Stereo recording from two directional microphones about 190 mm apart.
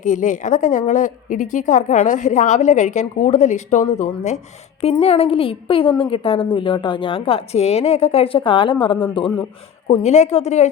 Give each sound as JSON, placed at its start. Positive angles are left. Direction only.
{"t": 0.0, "sound": "a woman's voice", "side_deg": 40}
{"t": 9.8, "sound": "a woman's voice", "side_deg": 35}